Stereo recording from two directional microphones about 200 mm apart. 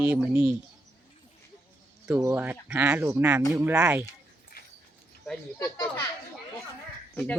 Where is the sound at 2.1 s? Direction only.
10° right (ahead or behind).